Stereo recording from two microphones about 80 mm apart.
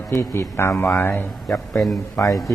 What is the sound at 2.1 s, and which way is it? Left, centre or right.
Speech, left.